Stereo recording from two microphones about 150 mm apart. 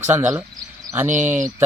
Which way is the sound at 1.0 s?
55° right (ahead or behind).